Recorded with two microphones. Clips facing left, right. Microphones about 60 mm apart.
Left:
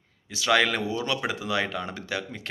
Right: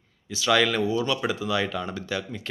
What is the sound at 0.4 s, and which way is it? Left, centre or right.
Speech, left.